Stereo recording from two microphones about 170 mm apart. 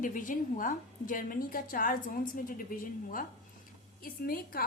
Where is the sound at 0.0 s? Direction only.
50° left (ahead or behind).